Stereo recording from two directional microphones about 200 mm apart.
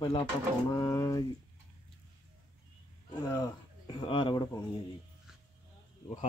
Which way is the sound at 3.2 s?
15° left (ahead or behind).